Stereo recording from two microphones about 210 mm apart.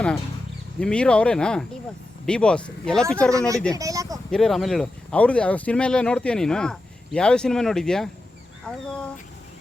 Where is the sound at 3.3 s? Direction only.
15° right (ahead or behind).